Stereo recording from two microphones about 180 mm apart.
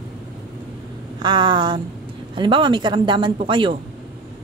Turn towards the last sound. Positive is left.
turn(degrees=-30)  # may be behind; listen again after turning